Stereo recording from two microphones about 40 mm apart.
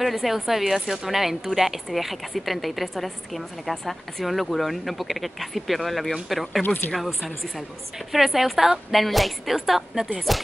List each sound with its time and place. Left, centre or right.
0.0 s a woman's voice: centre
6.6 s speech: left
6.9 s a woman's voice: centre